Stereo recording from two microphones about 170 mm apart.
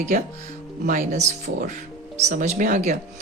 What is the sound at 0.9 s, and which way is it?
Speech, 45° right (ahead or behind).